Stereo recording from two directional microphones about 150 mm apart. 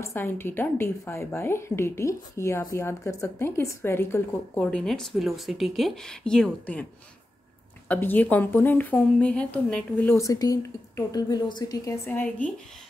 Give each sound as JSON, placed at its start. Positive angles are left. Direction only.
{"t": 0.0, "sound": "a woman's voice", "side_deg": 15}
{"t": 4.6, "sound": "speech", "side_deg": 5}
{"t": 7.9, "sound": "a woman's voice", "side_deg": 10}
{"t": 12.1, "sound": "a woman's voice", "side_deg": 10}